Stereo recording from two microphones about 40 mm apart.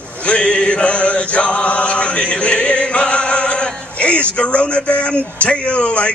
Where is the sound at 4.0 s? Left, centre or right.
Left.